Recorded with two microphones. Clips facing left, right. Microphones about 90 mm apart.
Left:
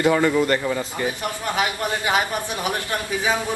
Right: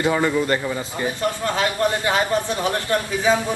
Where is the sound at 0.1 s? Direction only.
20° right (ahead or behind).